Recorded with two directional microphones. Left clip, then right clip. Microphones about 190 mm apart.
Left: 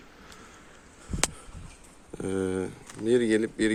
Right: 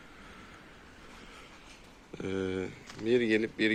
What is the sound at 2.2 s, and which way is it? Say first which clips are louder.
Speech: left 4 dB; 30° left (ahead or behind).